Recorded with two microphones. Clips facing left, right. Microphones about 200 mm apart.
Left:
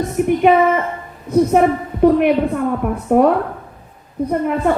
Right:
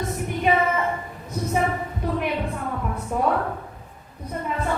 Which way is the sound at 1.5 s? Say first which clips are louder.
Left 10 dB; 60° left (ahead or behind).